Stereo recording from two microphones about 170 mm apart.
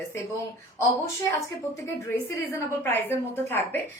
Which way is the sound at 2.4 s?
15° left (ahead or behind).